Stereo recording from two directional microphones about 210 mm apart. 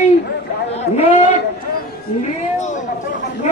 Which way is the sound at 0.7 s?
30° left (ahead or behind).